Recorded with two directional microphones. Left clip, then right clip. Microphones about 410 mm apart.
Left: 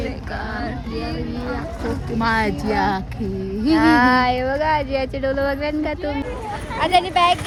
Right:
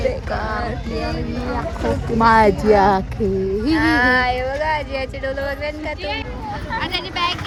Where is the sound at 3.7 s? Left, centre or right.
Centre.